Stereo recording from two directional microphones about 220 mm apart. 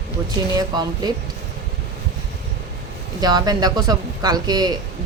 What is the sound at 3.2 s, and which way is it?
Speech, 20° right (ahead or behind).